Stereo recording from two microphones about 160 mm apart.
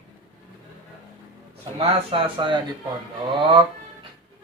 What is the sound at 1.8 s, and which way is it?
Speech, 35° right (ahead or behind).